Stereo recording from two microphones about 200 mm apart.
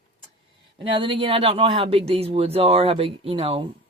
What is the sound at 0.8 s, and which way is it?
Speech, 25° right (ahead or behind).